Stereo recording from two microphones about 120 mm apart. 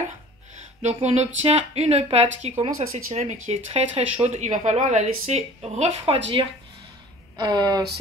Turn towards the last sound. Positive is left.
turn(degrees=-35)  # may be behind; listen again after turning